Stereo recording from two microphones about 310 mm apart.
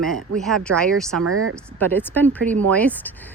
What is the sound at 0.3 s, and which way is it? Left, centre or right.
Speech, centre.